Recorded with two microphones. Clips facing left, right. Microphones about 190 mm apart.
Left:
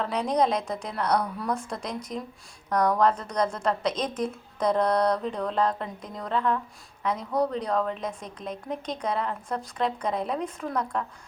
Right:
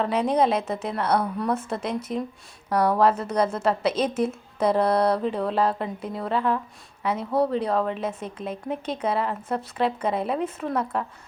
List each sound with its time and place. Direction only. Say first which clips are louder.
0.0 s a woman's voice: right 3 dB; 5° right (ahead or behind)
3.0 s a sound: right 3 dB; 5° right (ahead or behind)
7.0 s a woman's voice: right 3 dB; 5° right (ahead or behind)